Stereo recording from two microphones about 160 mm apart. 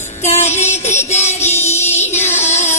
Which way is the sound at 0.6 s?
45° left (ahead or behind).